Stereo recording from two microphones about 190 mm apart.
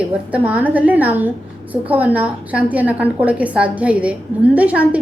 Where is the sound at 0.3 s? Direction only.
10° right (ahead or behind).